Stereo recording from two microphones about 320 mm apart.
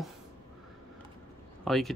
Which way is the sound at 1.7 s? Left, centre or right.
Centre.